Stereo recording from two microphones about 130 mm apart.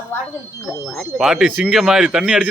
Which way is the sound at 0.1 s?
15° left (ahead or behind).